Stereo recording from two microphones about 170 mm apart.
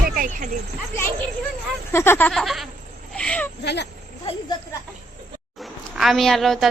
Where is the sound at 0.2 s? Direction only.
55° right (ahead or behind).